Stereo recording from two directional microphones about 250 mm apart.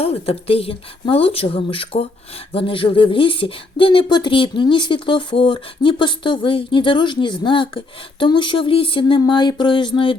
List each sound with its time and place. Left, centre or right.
0.0 s speech: left